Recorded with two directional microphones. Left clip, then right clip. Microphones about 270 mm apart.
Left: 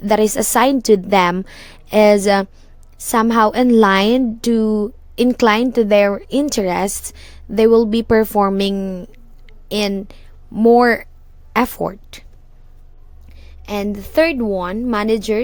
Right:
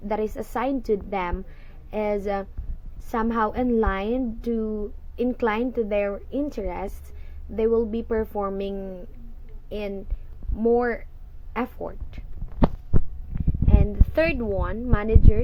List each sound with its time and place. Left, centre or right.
0.0 s a woman's voice: left
13.7 s a woman's voice: left